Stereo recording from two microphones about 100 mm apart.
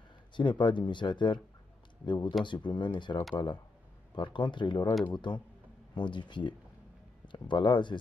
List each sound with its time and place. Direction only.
0.4 s speech: 50° left (ahead or behind)